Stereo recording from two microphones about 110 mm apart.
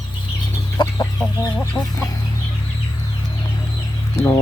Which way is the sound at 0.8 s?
40° left (ahead or behind).